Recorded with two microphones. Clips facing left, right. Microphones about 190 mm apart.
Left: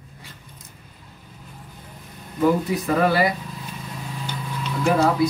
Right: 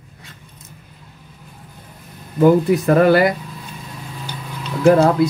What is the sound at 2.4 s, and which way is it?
Speech, 65° right (ahead or behind).